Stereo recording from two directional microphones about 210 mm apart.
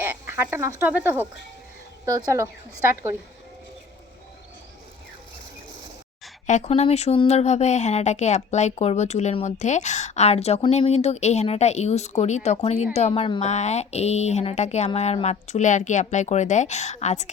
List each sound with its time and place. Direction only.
0.0 s a woman's voice: 10° right (ahead or behind)
6.5 s speech: 30° left (ahead or behind)